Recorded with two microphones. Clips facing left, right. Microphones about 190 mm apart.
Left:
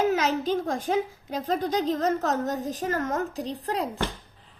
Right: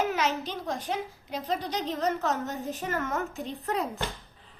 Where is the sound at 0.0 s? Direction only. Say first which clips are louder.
Left 4 dB; 40° left (ahead or behind).